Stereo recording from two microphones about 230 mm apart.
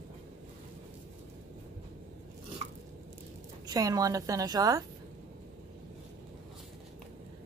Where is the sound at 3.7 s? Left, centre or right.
Centre.